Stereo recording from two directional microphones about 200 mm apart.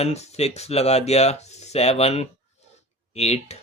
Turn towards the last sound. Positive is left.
turn(degrees=30)  # may be behind; listen again after turning